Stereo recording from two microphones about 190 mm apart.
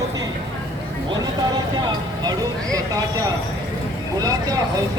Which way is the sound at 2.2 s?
20° right (ahead or behind).